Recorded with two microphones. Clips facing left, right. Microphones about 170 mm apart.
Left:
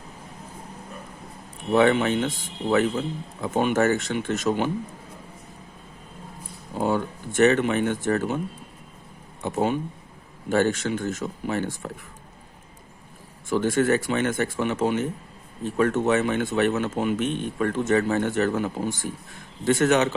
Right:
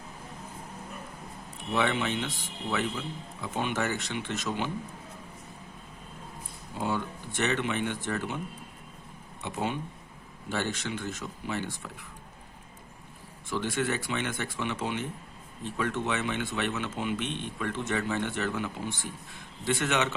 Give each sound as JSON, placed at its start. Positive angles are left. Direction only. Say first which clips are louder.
{"t": 1.7, "sound": "speech", "louder": "left 9 dB", "side_deg": 50}
{"t": 6.7, "sound": "speech", "louder": "left 7 dB", "side_deg": 50}
{"t": 9.4, "sound": "speech", "louder": "left 8 dB", "side_deg": 45}
{"t": 13.5, "sound": "speech", "louder": "left 9 dB", "side_deg": 45}